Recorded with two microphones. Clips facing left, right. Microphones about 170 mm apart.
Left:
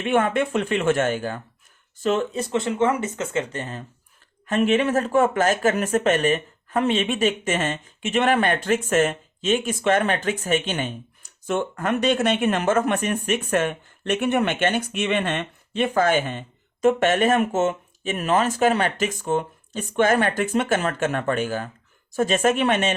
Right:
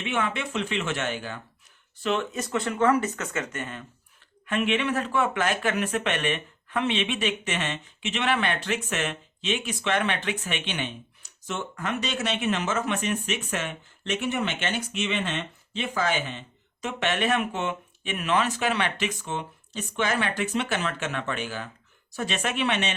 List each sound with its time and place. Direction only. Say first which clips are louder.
0.0 s speech: left 8 dB; 50° left (ahead or behind)
2.4 s speech: left 3 dB; 25° left (ahead or behind); by 23.0 s 45° left (ahead or behind)